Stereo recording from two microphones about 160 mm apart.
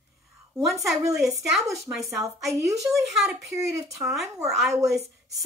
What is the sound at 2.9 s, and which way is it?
Speech, centre (ahead or behind).